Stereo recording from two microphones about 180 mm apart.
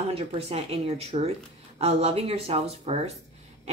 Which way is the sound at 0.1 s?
35° right (ahead or behind).